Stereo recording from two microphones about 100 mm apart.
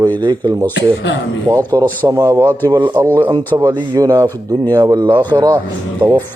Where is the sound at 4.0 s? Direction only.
35° right (ahead or behind).